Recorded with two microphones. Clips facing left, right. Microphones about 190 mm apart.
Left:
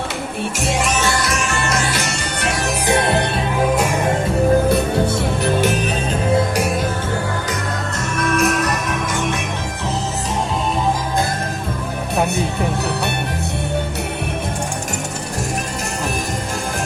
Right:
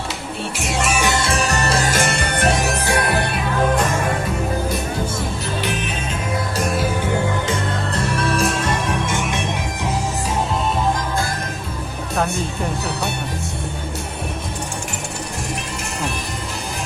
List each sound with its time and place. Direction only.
0.9 s music: 10° right (ahead or behind)
1.1 s music: 30° right (ahead or behind); by 2.5 s 55° right (ahead or behind)
2.8 s music: 25° left (ahead or behind)
5.5 s music: 45° left (ahead or behind)
8.1 s music: 30° right (ahead or behind)